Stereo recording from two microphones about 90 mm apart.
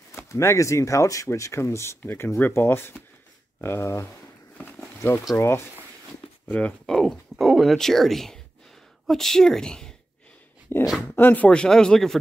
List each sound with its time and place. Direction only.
0.1 s speech: 30° left (ahead or behind)
6.4 s speech: 15° left (ahead or behind)
6.9 s a woman's voice: 5° left (ahead or behind)
10.7 s a sound: 25° left (ahead or behind)
11.1 s speech: 20° left (ahead or behind)